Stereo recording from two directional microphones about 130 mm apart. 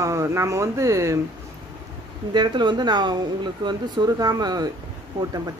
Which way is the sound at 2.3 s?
35° right (ahead or behind).